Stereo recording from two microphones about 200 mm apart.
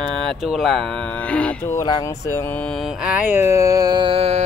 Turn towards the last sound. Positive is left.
turn(degrees=-30)  # may be behind; listen again after turning